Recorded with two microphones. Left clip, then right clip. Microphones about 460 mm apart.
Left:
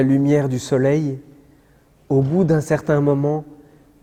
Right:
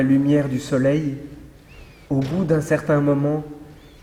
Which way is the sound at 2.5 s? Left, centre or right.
Left.